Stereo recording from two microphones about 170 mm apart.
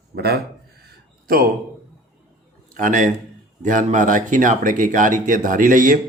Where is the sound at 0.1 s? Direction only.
70° right (ahead or behind).